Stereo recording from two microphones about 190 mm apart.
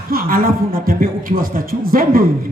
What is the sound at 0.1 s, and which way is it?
Speech, 50° right (ahead or behind).